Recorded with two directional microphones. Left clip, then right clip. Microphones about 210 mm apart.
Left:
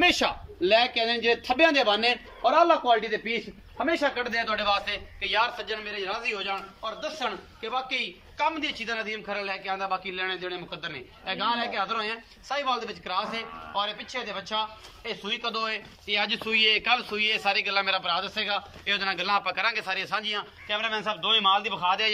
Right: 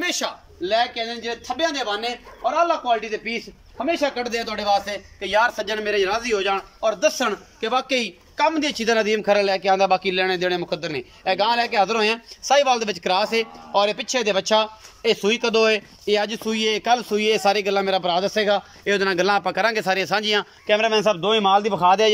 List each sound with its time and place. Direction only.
0.0 s a man's voice: 5° left (ahead or behind)
3.8 s a man's voice: 15° right (ahead or behind); by 22.1 s 40° right (ahead or behind)